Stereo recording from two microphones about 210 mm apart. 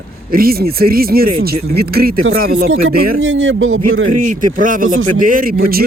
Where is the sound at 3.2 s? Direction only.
65° right (ahead or behind).